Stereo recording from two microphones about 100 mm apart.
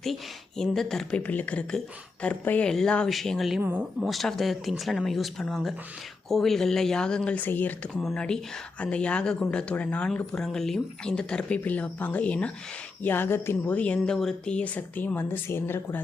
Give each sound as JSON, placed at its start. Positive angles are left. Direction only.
{"t": 0.0, "sound": "speech", "side_deg": 5}
{"t": 3.6, "sound": "speech", "side_deg": -20}
{"t": 4.0, "sound": "speech", "side_deg": 0}